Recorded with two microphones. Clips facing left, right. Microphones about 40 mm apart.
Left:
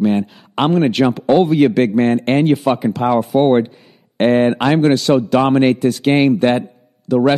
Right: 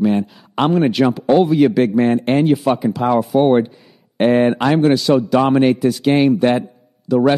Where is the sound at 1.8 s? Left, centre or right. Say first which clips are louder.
Left 1 dB; centre.